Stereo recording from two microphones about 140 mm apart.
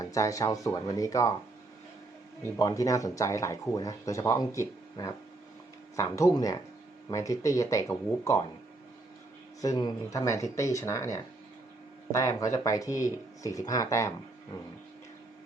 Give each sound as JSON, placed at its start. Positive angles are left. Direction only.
{"t": 0.0, "sound": "speech", "side_deg": 25}
{"t": 2.4, "sound": "speech", "side_deg": 25}
{"t": 9.6, "sound": "speech", "side_deg": 25}